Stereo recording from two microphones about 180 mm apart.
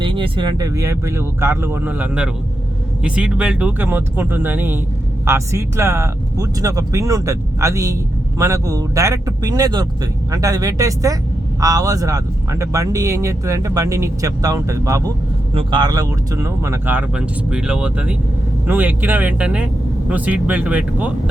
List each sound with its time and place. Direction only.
0.0 s speech: 30° right (ahead or behind); by 21.1 s 10° right (ahead or behind)